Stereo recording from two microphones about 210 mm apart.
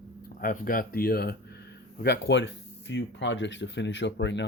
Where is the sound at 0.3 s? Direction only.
45° left (ahead or behind).